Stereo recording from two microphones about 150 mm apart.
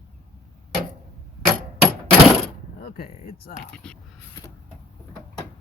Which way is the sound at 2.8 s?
90° left.